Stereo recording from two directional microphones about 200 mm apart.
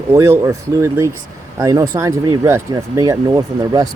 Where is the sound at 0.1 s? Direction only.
15° right (ahead or behind).